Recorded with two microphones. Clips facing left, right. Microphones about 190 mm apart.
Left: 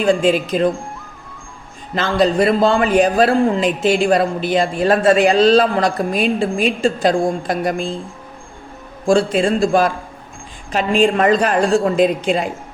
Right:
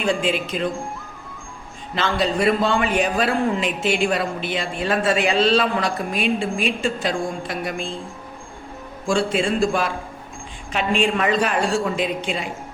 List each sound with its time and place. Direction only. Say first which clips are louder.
0.0 s a man's voice: left 7 dB; 40° left (ahead or behind)
2.0 s a man's voice: left 6 dB; 40° left (ahead or behind)
9.0 s a man's voice: left 6 dB; 40° left (ahead or behind)